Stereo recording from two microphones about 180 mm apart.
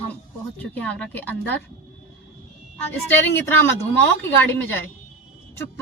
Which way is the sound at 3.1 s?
15° left (ahead or behind).